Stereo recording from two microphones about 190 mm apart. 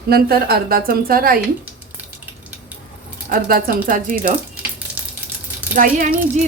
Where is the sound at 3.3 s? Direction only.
50° right (ahead or behind).